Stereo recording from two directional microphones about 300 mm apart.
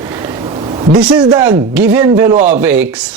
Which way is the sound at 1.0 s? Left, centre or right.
Centre.